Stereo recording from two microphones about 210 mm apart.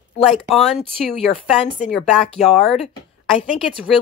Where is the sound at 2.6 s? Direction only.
Centre (ahead or behind).